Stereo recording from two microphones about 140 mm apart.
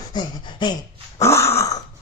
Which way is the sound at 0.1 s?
35° left (ahead or behind).